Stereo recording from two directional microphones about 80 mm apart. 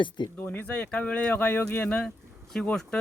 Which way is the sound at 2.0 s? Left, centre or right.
Centre.